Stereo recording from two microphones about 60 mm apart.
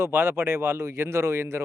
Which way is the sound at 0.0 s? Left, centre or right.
Right.